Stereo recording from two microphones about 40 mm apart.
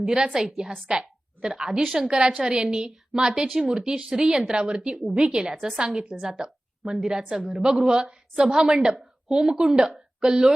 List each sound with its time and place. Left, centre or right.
0.0 s a woman's voice: centre
2.1 s a woman's voice: right